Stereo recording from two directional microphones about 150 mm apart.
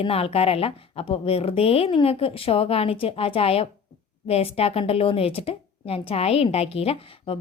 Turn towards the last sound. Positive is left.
turn(degrees=40)  # may be behind; listen again after turning